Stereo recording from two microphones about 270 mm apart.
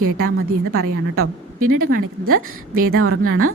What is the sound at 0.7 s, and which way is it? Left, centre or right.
A woman's voice, right.